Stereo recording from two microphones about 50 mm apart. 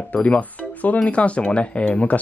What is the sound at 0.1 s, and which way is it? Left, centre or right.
Speech, left.